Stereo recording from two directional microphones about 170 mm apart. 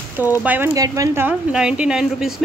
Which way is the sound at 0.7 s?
20° right (ahead or behind).